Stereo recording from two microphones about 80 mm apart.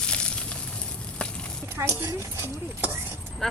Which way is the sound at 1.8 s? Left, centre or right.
Right.